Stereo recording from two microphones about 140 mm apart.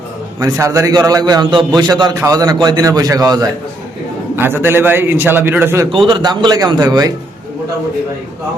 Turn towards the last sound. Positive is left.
turn(degrees=-30)  # may be behind; listen again after turning